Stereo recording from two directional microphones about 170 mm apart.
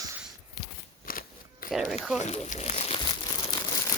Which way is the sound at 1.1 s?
55° left (ahead or behind).